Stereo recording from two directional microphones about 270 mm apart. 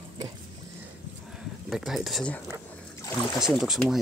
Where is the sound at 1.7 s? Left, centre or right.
Centre.